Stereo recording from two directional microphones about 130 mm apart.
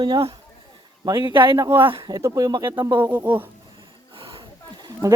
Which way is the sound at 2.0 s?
25° right (ahead or behind).